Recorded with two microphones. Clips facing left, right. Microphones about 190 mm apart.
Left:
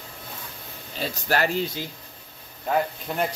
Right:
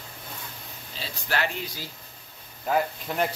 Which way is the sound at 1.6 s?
25° left (ahead or behind).